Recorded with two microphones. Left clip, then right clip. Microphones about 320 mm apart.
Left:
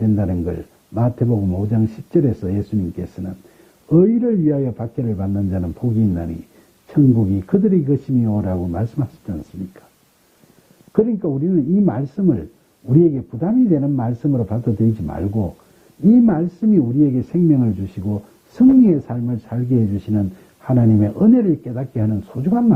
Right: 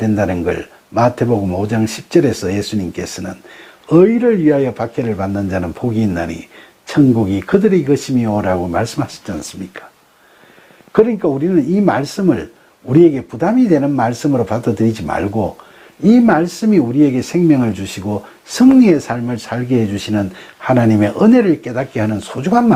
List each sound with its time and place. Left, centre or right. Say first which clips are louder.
0.2 s speech: right 8 dB; centre
1.7 s speech: right 5 dB; centre
10.9 s speech: right 6 dB; centre